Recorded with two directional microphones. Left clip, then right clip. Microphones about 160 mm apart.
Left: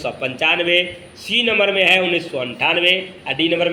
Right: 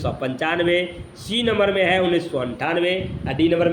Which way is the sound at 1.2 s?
55° right (ahead or behind).